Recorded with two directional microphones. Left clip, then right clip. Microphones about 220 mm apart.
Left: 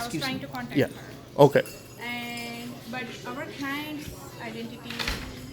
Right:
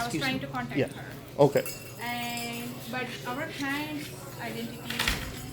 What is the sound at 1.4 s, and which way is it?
Speech, 35° left (ahead or behind).